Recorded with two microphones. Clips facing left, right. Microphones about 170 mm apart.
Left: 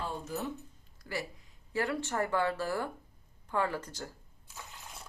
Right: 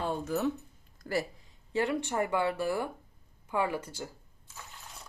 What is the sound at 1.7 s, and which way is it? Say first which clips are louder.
Speech: right 3 dB; 20° right (ahead or behind).